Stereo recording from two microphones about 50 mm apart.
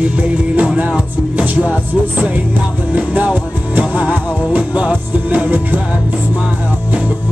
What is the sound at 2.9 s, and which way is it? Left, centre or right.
Music, right.